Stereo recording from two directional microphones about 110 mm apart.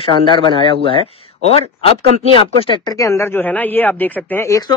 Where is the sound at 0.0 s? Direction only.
45° left (ahead or behind).